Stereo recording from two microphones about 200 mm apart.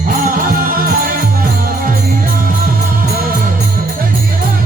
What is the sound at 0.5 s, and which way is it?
Music, 45° right (ahead or behind).